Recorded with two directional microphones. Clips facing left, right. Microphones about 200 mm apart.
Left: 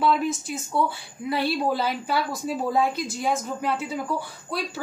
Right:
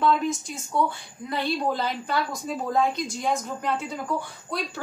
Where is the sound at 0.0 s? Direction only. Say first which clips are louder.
Even; 5° left (ahead or behind).